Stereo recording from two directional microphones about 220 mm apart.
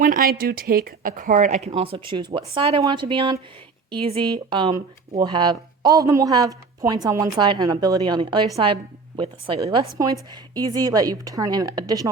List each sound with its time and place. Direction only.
0.0 s a woman's voice: 40° right (ahead or behind); by 12.1 s 15° right (ahead or behind)